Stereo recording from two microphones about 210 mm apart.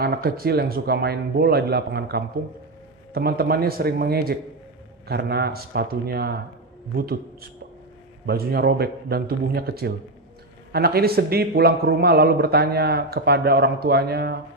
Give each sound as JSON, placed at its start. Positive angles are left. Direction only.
{"t": 0.0, "sound": "a man's voice", "side_deg": -45}
{"t": 8.3, "sound": "a man's voice", "side_deg": -50}